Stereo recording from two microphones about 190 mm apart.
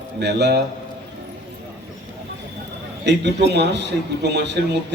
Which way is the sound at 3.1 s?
60° right (ahead or behind).